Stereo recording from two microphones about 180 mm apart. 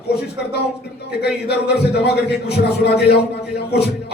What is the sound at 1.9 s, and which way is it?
Speech, 65° left (ahead or behind).